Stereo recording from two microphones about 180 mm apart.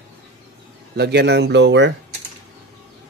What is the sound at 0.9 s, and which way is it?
Speech, 65° right (ahead or behind).